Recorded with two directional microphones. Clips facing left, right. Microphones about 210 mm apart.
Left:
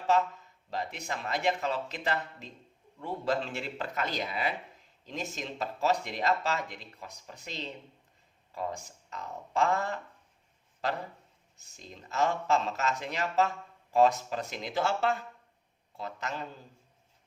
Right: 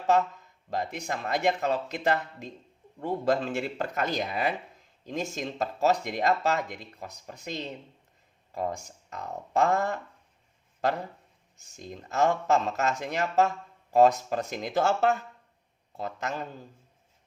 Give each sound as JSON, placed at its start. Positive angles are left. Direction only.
{"t": 0.7, "sound": "speech", "side_deg": -45}
{"t": 12.0, "sound": "speech", "side_deg": -45}